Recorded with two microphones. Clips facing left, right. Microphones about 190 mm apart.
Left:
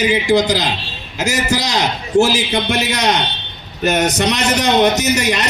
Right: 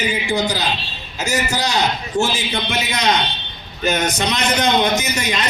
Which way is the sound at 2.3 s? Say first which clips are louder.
Left 5 dB; 70° left (ahead or behind).